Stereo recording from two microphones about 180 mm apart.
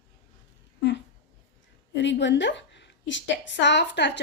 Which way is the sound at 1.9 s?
85° left.